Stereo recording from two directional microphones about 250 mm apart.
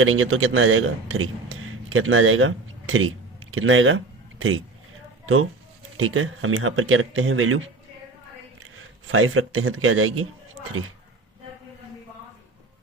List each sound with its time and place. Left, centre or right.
0.0 s a man's voice: right
8.7 s speech: right